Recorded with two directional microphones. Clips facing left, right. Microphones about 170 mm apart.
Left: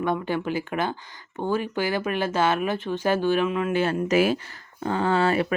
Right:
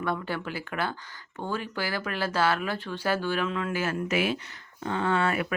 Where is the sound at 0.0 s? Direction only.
20° left (ahead or behind).